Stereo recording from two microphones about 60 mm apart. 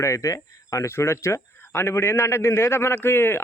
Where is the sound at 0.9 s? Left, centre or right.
Left.